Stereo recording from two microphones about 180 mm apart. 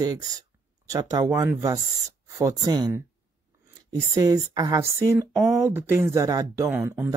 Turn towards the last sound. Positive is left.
turn(degrees=-10)  # may be behind; listen again after turning